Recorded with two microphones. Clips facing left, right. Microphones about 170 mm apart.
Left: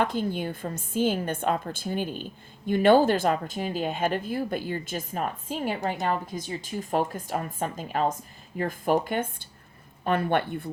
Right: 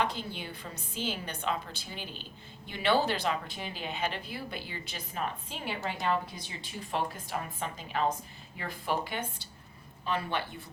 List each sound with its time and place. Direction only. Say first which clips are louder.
0.0 s a woman's voice: left 7 dB; 50° left (ahead or behind)